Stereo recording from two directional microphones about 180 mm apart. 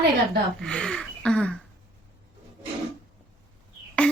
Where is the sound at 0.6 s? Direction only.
5° left (ahead or behind).